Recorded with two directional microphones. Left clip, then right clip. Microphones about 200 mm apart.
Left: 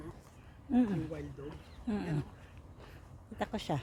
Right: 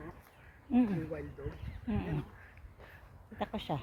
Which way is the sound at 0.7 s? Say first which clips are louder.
Even; 15° left (ahead or behind).